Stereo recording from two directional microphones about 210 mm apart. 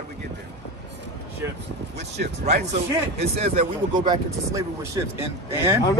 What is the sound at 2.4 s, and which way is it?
A man's voice, 35° right (ahead or behind).